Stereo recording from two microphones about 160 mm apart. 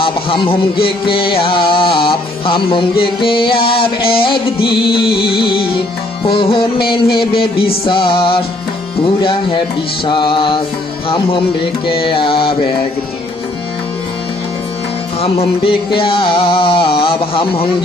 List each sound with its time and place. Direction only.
0.0 s music: 35° left (ahead or behind)
15.2 s music: 35° left (ahead or behind)